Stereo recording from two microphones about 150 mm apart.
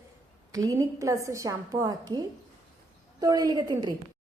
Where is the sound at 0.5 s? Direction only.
25° right (ahead or behind).